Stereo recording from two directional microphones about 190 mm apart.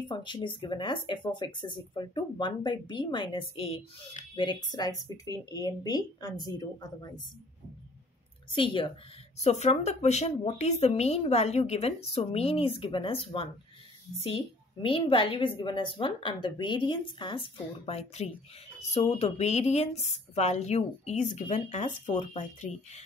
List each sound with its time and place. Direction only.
0.1 s a woman's voice: 25° left (ahead or behind)
4.7 s a woman's voice: 20° left (ahead or behind)
8.5 s a woman's voice: 25° left (ahead or behind)